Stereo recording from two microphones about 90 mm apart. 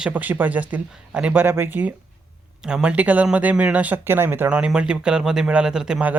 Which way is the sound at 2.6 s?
10° right (ahead or behind).